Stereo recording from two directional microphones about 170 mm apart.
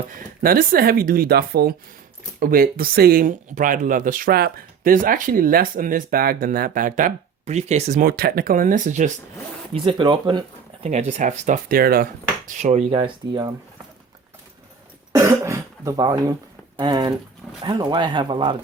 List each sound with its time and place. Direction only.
0.2 s speech: 60° right (ahead or behind)
9.7 s speech: 30° right (ahead or behind)
10.8 s speech: 40° right (ahead or behind); by 12.0 s 60° right (ahead or behind)
12.5 s speech: 45° right (ahead or behind)
13.0 s speech: 25° right (ahead or behind)
15.1 s cough: 20° right (ahead or behind)
16.7 s speech: 25° right (ahead or behind)